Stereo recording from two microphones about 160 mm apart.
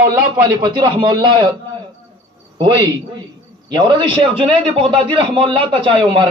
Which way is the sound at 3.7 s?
30° right (ahead or behind).